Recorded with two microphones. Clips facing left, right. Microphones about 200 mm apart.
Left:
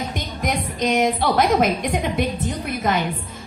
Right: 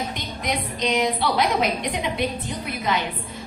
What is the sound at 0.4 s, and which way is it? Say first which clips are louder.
A woman's voice: left 3 dB; 50° left (ahead or behind).